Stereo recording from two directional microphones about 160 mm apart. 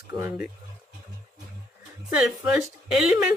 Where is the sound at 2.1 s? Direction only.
5° right (ahead or behind).